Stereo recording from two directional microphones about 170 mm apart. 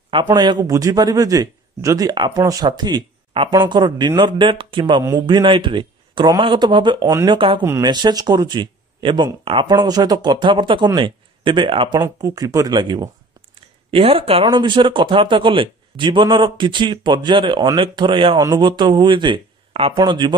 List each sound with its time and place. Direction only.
0.1 s speech: 25° right (ahead or behind)